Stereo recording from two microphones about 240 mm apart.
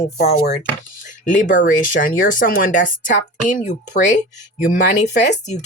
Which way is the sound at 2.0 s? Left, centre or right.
Left.